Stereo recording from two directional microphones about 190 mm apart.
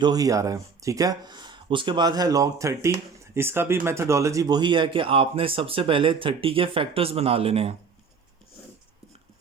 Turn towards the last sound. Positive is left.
turn(degrees=-30)  # may be behind; listen again after turning